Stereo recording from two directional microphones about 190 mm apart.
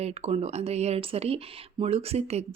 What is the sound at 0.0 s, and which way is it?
Speech, 35° right (ahead or behind).